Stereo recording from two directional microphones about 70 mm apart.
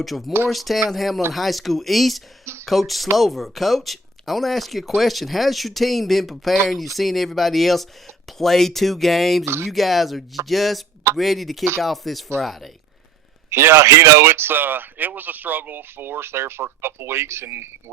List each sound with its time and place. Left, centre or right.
0.0 s speech: centre
2.4 s a sound: right
2.6 s speech: centre
13.5 s speech: right